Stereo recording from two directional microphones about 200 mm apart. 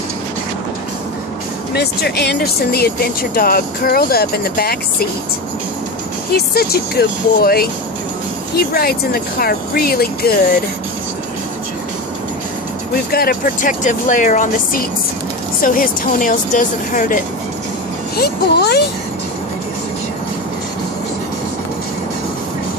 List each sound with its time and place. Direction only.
1.7 s speech: 55° left (ahead or behind)
6.3 s speech: 50° left (ahead or behind)
13.1 s speech: 45° left (ahead or behind)
18.1 s speech: 55° left (ahead or behind)